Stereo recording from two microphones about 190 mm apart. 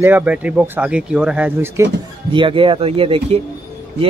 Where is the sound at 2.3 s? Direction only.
25° right (ahead or behind).